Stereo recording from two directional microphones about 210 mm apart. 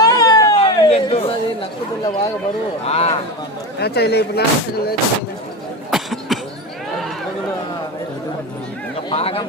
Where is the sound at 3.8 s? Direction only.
50° left (ahead or behind).